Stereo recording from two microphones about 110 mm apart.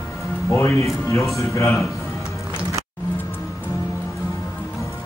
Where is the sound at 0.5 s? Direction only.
25° left (ahead or behind).